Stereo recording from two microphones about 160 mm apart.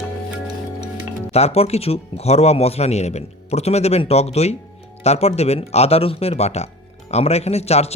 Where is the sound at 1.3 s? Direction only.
40° left (ahead or behind).